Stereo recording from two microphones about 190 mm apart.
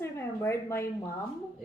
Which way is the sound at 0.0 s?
15° left (ahead or behind).